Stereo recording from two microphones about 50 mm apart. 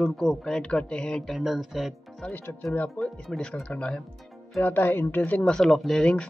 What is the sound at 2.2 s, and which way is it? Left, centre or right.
Speech, left.